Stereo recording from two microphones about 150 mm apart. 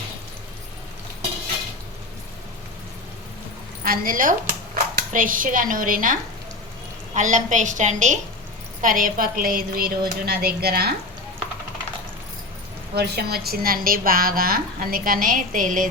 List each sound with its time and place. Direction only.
3.8 s speech: 70° right (ahead or behind)
7.2 s a woman's voice: 55° right (ahead or behind); by 9.9 s 75° right (ahead or behind)
10.2 s speech: 90° right
12.9 s a woman's voice: 90° right; by 15.9 s 60° right (ahead or behind)